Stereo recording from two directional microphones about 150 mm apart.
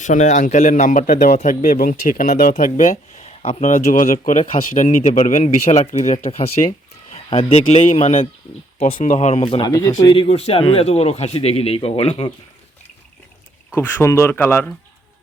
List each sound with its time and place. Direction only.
0.0 s a man's voice: 55° left (ahead or behind)
9.0 s speech: 55° left (ahead or behind)
9.6 s speech: 25° left (ahead or behind)
10.2 s a man's voice: 45° left (ahead or behind)
13.7 s speech: 15° left (ahead or behind)